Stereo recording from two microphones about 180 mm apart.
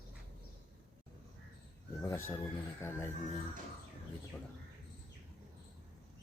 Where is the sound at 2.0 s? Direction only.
10° left (ahead or behind).